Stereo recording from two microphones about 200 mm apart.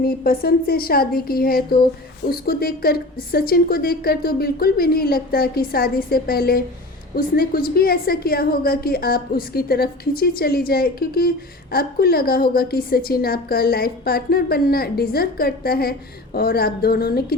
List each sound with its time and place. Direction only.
0.0 s a woman's voice: 50° left (ahead or behind)